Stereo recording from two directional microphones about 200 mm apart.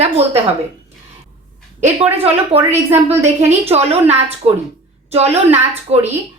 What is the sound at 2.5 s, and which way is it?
A woman's voice, 30° right (ahead or behind).